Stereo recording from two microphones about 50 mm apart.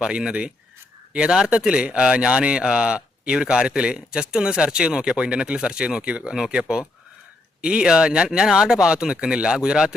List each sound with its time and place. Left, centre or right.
0.0 s speech: centre